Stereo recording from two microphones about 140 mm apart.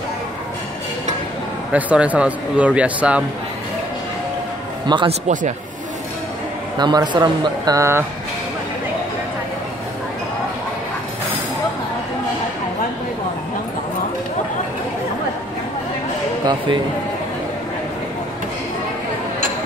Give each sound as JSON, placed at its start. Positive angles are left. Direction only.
{"t": 1.7, "sound": "speech", "side_deg": -10}
{"t": 4.8, "sound": "a man's voice", "side_deg": -35}
{"t": 6.8, "sound": "speech", "side_deg": -30}
{"t": 16.4, "sound": "speech", "side_deg": -35}